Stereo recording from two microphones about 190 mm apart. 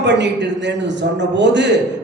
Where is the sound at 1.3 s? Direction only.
65° right (ahead or behind).